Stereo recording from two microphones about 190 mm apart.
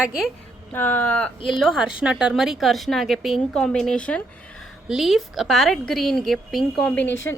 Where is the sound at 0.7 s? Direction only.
10° left (ahead or behind).